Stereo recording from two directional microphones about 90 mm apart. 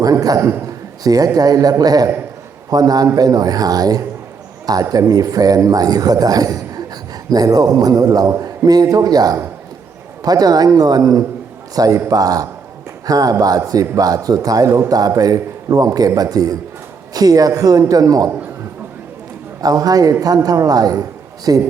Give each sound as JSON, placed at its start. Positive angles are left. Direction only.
{"t": 0.0, "sound": "a man's voice", "side_deg": -45}
{"t": 19.6, "sound": "a man's voice", "side_deg": -45}